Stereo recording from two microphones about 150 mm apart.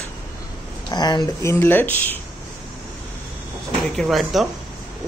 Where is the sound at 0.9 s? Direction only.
30° left (ahead or behind).